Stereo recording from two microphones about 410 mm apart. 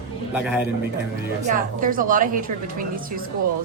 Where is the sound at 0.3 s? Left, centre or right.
Centre.